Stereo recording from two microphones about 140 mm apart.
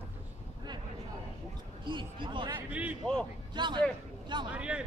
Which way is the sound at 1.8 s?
35° right (ahead or behind).